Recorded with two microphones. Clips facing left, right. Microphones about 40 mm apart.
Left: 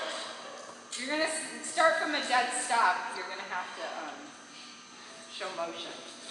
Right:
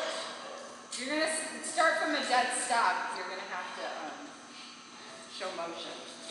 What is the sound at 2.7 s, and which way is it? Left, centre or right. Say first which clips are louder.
Speech: left 2 dB; left.